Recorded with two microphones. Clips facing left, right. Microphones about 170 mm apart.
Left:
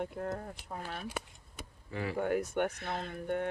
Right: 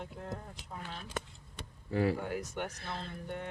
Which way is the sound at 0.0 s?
55° left (ahead or behind).